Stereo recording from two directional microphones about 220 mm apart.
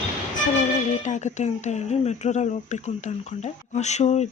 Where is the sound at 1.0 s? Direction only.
30° left (ahead or behind).